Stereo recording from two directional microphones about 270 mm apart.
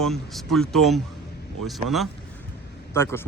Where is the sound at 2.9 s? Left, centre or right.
Centre.